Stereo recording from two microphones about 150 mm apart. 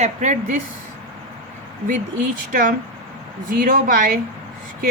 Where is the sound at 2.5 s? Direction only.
65° right (ahead or behind).